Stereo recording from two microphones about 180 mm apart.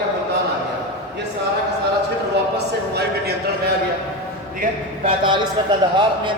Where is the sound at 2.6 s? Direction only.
65° right (ahead or behind).